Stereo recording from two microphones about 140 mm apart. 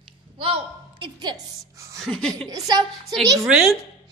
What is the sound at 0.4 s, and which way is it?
A woman's voice, 40° right (ahead or behind).